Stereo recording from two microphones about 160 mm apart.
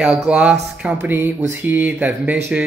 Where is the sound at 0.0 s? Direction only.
5° right (ahead or behind).